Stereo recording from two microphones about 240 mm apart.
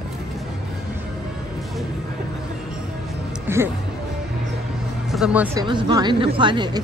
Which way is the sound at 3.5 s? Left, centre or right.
Centre.